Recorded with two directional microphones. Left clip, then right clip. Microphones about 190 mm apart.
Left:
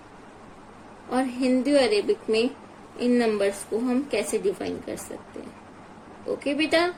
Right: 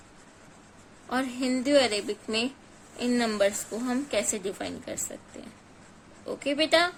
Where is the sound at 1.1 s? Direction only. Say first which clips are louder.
Left 5 dB; 60° right (ahead or behind).